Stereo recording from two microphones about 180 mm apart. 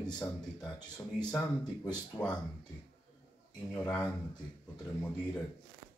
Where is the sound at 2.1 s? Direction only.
5° left (ahead or behind).